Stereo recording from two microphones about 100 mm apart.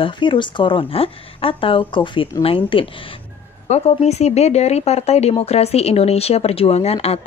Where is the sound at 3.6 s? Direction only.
90° left.